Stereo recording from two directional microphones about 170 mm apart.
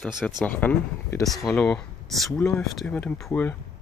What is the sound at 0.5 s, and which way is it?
Speech, 10° left (ahead or behind).